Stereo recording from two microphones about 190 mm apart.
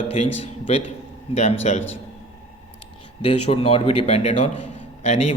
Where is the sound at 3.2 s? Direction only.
30° left (ahead or behind).